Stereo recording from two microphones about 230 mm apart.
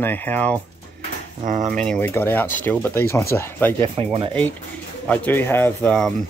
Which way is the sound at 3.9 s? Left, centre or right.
Right.